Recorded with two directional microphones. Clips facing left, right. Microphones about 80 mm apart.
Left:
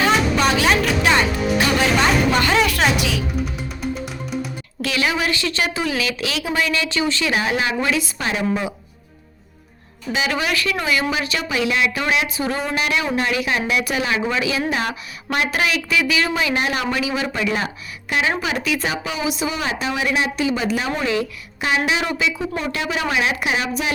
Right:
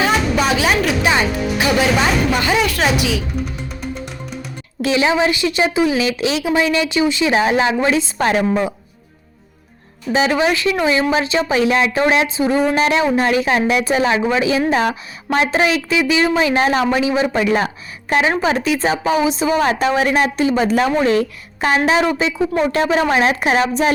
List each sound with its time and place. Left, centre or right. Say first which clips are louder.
0.0 s music: right 1 dB; centre
1.5 s speech: right 2 dB; centre
3.9 s music: left 1 dB; centre
4.8 s a woman's voice: right 6 dB; right
10.1 s a woman's voice: right 6 dB; right